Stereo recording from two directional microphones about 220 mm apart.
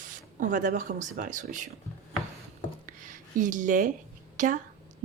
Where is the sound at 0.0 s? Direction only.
35° right (ahead or behind).